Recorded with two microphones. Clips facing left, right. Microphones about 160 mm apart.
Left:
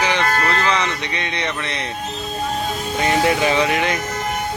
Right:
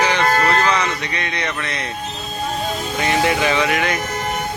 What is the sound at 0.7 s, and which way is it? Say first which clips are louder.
A man's voice: right 1 dB; 25° left (ahead or behind).